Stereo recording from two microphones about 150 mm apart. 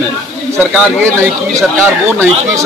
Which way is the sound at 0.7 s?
15° right (ahead or behind).